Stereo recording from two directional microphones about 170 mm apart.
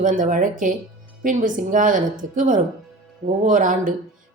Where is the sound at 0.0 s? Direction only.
50° right (ahead or behind).